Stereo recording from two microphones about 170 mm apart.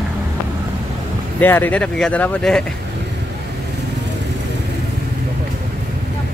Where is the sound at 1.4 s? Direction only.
10° left (ahead or behind).